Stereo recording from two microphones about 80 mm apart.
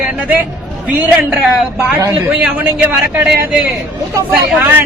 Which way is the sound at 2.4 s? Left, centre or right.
Centre.